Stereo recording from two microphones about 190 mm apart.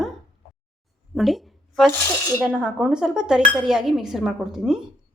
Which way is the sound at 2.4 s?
5° right (ahead or behind).